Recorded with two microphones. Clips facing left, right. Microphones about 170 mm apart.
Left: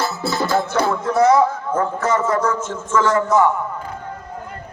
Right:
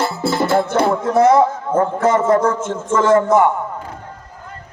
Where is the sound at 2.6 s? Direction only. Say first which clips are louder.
Right 2 dB; 55° right (ahead or behind).